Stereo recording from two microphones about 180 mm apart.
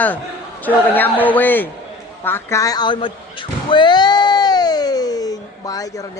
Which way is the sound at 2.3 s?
15° left (ahead or behind).